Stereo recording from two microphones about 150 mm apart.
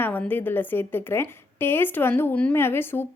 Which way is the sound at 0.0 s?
10° left (ahead or behind).